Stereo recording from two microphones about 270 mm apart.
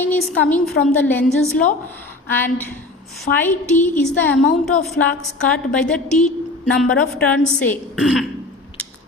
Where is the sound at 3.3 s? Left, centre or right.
Centre.